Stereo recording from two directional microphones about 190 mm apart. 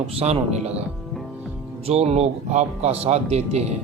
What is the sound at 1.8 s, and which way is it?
Speech, 35° right (ahead or behind).